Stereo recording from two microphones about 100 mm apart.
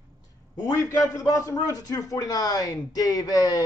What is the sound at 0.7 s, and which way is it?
A man's voice, 30° left (ahead or behind).